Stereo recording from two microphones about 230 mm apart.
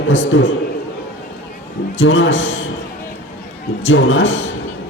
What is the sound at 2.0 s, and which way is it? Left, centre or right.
Speech, left.